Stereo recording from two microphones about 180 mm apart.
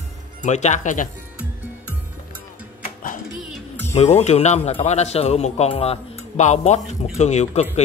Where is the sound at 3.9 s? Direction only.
35° left (ahead or behind).